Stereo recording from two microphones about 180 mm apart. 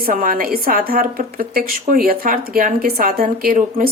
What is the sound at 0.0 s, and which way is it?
A woman's voice, 50° right (ahead or behind).